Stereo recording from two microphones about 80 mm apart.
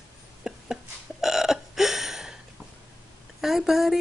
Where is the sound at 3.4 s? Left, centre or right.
Centre.